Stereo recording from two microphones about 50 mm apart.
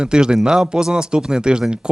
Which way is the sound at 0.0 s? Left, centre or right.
Centre.